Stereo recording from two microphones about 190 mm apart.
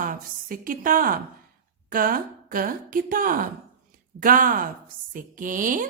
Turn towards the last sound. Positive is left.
turn(degrees=-45)  # may be behind; listen again after turning